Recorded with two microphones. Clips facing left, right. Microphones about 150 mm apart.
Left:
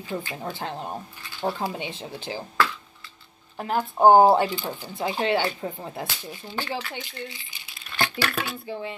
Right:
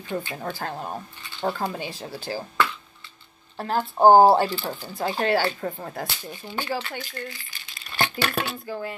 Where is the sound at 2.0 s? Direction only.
20° left (ahead or behind).